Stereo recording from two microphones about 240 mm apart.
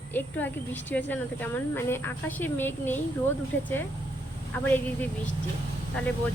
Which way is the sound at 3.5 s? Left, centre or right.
Left.